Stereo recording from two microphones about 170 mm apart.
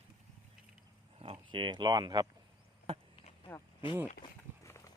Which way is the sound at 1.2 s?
30° right (ahead or behind).